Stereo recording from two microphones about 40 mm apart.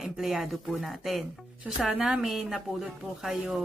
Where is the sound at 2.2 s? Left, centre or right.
Centre.